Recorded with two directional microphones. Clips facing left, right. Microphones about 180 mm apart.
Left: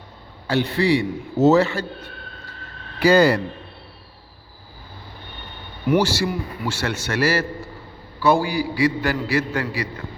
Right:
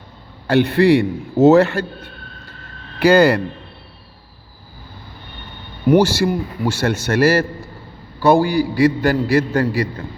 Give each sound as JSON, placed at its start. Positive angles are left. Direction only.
{"t": 0.4, "sound": "a man's voice", "side_deg": -60}
{"t": 3.0, "sound": "a man's voice", "side_deg": -60}
{"t": 5.9, "sound": "a man's voice", "side_deg": -50}